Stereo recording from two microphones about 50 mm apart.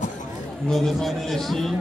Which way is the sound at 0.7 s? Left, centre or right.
Centre.